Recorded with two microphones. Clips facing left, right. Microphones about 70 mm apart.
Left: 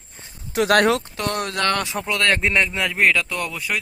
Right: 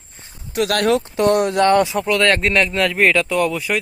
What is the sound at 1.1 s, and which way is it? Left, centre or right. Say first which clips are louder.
Speech: right 9 dB; right.